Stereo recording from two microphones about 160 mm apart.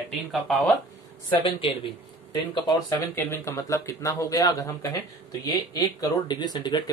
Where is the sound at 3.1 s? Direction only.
15° left (ahead or behind).